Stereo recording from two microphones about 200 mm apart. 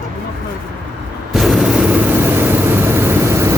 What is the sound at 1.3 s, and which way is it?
Vehicle, centre (ahead or behind).